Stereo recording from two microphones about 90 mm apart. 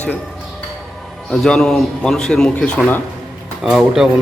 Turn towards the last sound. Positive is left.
turn(degrees=-5)  # may be behind; listen again after turning